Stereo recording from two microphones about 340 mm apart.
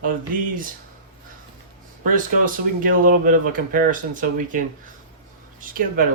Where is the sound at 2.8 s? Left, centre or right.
Right.